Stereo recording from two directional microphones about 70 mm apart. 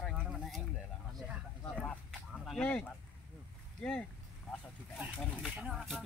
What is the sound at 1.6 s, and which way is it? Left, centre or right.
Speech, centre.